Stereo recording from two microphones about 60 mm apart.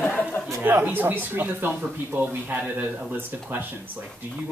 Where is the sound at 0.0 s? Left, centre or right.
Left.